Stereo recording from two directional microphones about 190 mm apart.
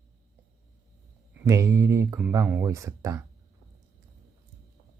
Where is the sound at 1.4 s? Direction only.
15° right (ahead or behind).